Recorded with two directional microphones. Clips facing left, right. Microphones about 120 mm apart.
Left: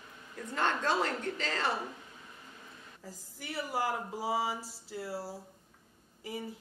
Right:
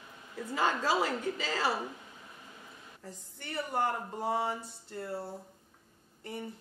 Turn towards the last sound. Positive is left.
turn(degrees=5)  # may be behind; listen again after turning